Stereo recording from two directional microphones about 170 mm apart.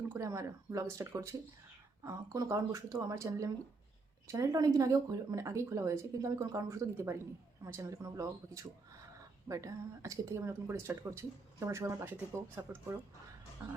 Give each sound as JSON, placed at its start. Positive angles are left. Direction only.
{"t": 0.1, "sound": "speech", "side_deg": -20}